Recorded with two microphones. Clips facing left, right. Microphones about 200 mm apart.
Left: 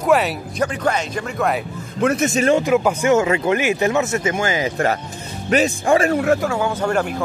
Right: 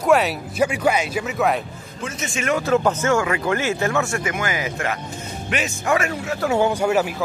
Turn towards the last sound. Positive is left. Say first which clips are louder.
# even
turn(degrees=-5)  # may be behind; listen again after turning